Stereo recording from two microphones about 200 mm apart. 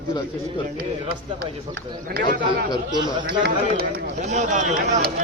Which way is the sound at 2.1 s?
50° right (ahead or behind).